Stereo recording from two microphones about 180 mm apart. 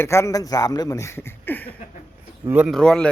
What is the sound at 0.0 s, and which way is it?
Speech, 15° left (ahead or behind).